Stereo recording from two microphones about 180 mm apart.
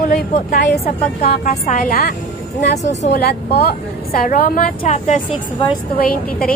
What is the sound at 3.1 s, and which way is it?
A woman's voice, 60° left (ahead or behind).